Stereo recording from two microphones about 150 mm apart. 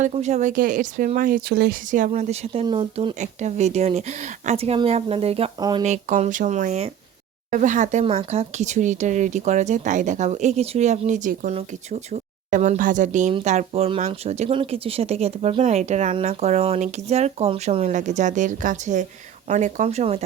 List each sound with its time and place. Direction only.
0.0 s speech: 50° right (ahead or behind); by 3.2 s 35° right (ahead or behind)
3.2 s speech: 50° right (ahead or behind)
5.5 s speech: 25° right (ahead or behind)
5.8 s speech: 50° right (ahead or behind)
11.5 s speech: 45° right (ahead or behind)